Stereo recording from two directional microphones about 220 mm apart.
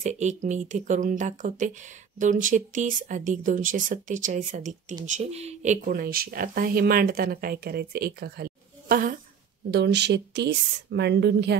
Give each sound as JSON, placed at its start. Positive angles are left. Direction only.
{"t": 0.0, "sound": "speech", "side_deg": -30}